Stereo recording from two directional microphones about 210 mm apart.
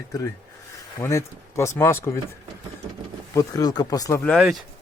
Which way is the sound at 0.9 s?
15° left (ahead or behind).